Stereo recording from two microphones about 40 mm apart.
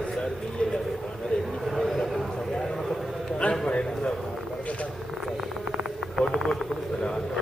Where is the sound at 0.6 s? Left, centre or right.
Left.